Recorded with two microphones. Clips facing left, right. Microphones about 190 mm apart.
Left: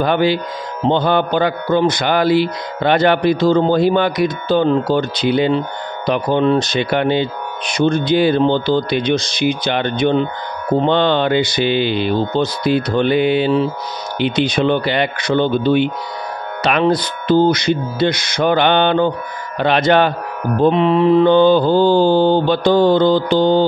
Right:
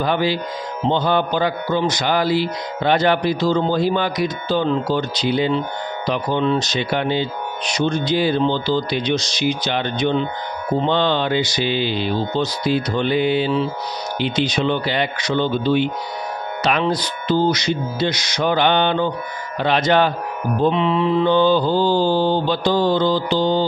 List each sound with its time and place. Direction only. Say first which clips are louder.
0.0 s a man's voice: left 4 dB; 60° left (ahead or behind)